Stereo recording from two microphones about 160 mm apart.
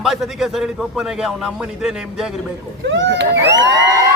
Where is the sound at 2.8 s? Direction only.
90° right.